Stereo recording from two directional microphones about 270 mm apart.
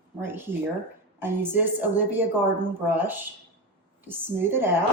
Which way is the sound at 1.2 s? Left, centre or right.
Centre.